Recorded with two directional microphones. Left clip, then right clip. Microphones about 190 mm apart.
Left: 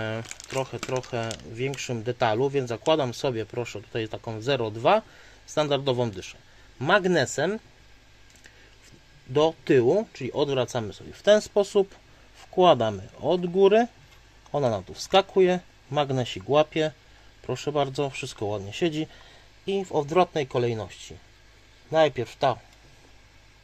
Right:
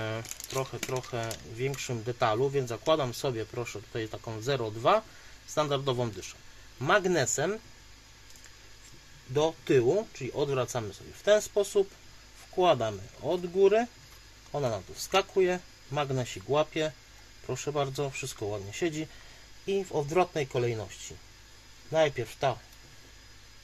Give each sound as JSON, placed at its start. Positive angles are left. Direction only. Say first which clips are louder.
{"t": 0.0, "sound": "crumpling", "louder": "left 4 dB", "side_deg": 25}
{"t": 0.6, "sound": "speech", "louder": "left 4 dB", "side_deg": 35}
{"t": 9.3, "sound": "speech", "louder": "left 5 dB", "side_deg": 35}
{"t": 21.9, "sound": "speech", "louder": "left 5 dB", "side_deg": 35}